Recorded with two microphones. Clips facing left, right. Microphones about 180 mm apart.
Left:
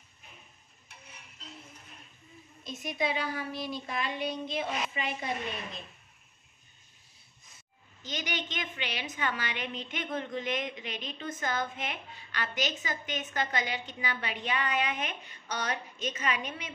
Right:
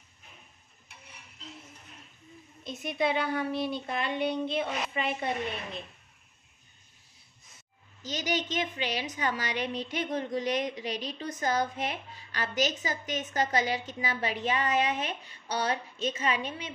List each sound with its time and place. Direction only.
2.6 s a woman's voice: 60° right (ahead or behind)
8.0 s a woman's voice: 40° right (ahead or behind)